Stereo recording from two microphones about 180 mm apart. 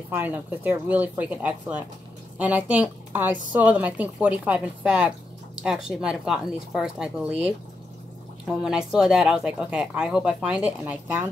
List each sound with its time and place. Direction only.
0.1 s a woman's voice: 10° right (ahead or behind)